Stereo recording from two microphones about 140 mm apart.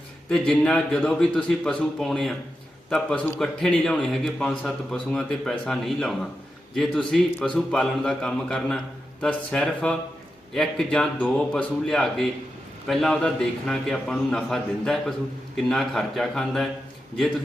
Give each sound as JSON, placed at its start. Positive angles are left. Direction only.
{"t": 0.3, "sound": "a man's voice", "side_deg": 5}
{"t": 3.3, "sound": "a man's voice", "side_deg": 5}